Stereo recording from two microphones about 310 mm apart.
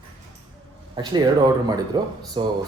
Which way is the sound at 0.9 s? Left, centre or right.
Centre.